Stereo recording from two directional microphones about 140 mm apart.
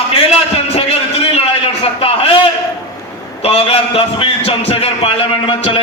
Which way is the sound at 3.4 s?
45° left (ahead or behind).